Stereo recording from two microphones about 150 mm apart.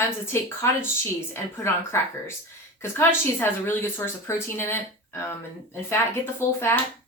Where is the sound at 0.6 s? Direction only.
15° left (ahead or behind).